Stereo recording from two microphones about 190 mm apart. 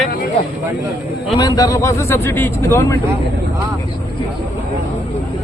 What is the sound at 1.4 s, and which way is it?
Speech, 20° left (ahead or behind).